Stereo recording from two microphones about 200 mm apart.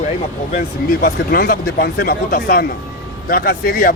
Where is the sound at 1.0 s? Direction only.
50° left (ahead or behind).